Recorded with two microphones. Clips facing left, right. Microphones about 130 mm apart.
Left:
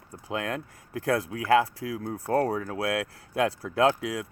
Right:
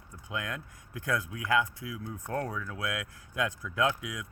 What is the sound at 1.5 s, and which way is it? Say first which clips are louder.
Speech: left 6 dB; 80° left.